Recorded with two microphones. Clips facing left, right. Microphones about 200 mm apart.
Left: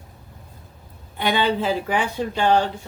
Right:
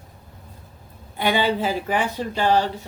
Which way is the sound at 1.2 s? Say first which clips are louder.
Even; 10° right (ahead or behind).